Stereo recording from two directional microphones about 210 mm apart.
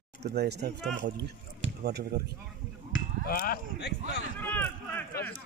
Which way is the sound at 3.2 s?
45° left (ahead or behind).